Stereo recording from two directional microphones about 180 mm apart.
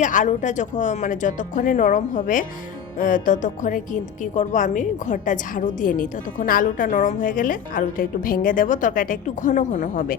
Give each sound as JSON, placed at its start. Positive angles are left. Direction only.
{"t": 0.0, "sound": "a woman's voice", "side_deg": 45}